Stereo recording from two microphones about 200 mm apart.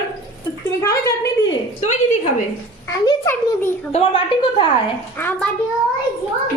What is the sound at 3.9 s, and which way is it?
Speech, 30° left (ahead or behind).